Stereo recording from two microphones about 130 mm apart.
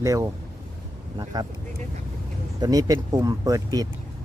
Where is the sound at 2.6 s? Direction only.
30° right (ahead or behind).